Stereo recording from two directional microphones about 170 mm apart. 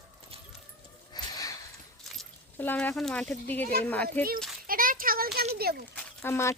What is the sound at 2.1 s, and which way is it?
Speech, 10° left (ahead or behind).